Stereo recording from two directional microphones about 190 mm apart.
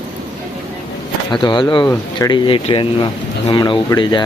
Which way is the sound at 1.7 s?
20° left (ahead or behind).